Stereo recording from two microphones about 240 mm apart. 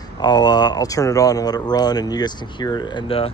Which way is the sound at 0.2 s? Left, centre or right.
Centre.